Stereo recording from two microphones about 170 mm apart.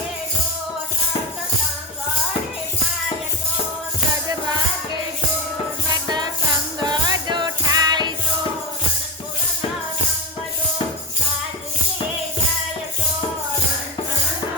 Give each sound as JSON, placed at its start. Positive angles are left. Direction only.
{"t": 5.9, "sound": "music", "side_deg": -25}